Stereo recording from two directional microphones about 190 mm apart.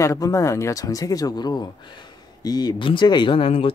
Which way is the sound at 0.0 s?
15° left (ahead or behind).